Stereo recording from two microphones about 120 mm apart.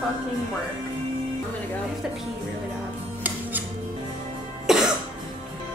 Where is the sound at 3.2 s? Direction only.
15° right (ahead or behind).